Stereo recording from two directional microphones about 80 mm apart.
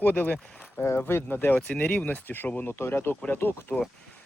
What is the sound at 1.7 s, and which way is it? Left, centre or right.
Speech, centre.